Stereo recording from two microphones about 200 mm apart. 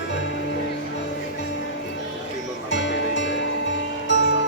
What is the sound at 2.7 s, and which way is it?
Music, 65° left (ahead or behind).